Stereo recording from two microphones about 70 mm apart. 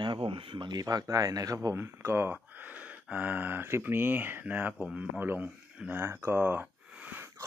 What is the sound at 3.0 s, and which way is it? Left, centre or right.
Speech, right.